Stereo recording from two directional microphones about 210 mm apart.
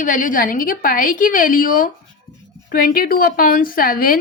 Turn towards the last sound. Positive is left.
turn(degrees=45)  # may be behind; listen again after turning